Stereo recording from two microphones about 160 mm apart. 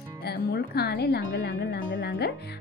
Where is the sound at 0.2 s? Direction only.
90° left.